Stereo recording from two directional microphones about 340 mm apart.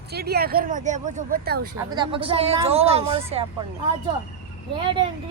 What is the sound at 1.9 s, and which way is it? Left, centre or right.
A woman's voice, centre.